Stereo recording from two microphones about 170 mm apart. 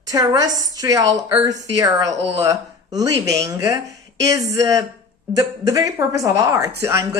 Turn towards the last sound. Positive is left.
turn(degrees=-15)  # may be behind; listen again after turning